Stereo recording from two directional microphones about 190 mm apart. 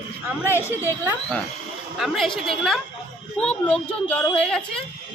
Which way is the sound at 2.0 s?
Centre (ahead or behind).